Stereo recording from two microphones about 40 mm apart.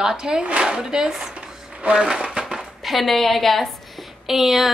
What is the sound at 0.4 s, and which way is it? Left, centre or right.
Speech, right.